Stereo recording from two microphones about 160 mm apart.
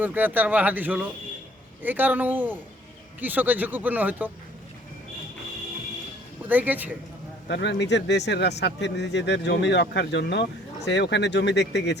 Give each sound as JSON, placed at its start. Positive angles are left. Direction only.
{"t": 0.0, "sound": "speech", "side_deg": -10}
{"t": 6.5, "sound": "speech", "side_deg": -10}
{"t": 7.4, "sound": "a man's voice", "side_deg": 90}